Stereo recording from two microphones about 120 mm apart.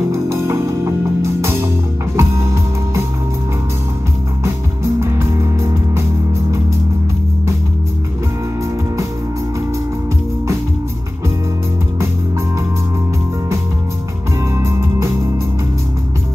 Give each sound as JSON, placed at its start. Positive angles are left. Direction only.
{"t": 0.1, "sound": "music", "side_deg": -20}
{"t": 5.0, "sound": "music", "side_deg": -25}